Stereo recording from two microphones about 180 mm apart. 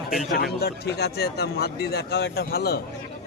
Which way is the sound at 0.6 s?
65° left (ahead or behind).